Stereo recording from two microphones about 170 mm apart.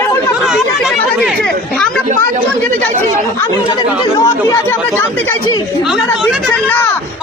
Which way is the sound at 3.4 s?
20° left (ahead or behind).